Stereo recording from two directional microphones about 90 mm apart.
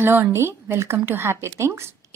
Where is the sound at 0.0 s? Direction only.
30° right (ahead or behind).